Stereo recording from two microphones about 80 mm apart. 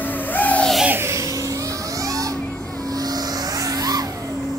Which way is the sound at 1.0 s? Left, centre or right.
Right.